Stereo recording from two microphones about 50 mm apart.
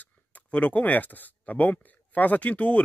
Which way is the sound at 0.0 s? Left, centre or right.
Left.